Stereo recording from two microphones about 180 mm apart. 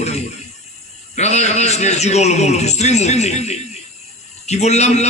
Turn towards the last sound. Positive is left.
turn(degrees=40)  # may be behind; listen again after turning